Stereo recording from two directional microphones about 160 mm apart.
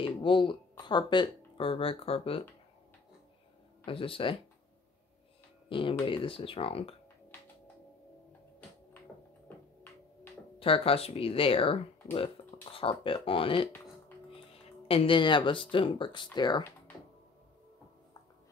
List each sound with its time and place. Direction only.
0.0 s speech: 30° left (ahead or behind)
3.8 s speech: 35° left (ahead or behind)
5.7 s speech: 30° left (ahead or behind)
10.6 s speech: 35° left (ahead or behind)
14.9 s speech: 35° left (ahead or behind)